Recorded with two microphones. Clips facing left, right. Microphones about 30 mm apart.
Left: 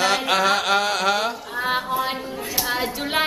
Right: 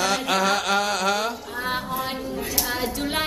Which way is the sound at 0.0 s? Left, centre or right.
Centre.